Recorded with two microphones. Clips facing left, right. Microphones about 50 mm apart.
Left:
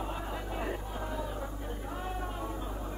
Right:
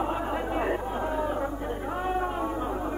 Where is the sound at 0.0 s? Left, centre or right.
Right.